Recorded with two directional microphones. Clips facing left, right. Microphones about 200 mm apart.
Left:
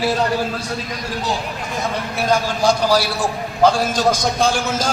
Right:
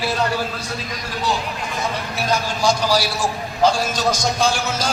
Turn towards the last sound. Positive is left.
turn(degrees=50)  # may be behind; listen again after turning